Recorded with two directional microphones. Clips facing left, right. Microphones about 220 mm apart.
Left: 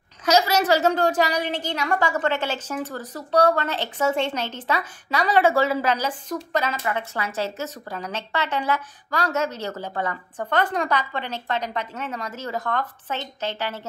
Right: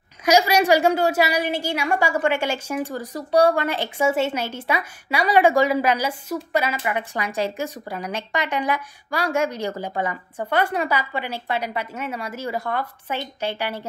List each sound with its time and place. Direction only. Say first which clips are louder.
0.2 s a woman's voice: right 2 dB; 10° right (ahead or behind)